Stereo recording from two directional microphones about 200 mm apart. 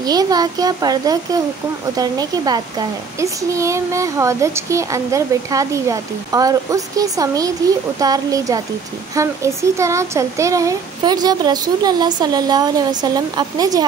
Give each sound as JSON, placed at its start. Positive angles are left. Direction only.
{"t": 0.0, "sound": "a child's voice", "side_deg": -20}